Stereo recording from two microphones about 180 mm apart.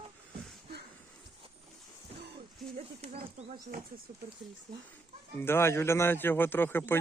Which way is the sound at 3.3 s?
50° right (ahead or behind).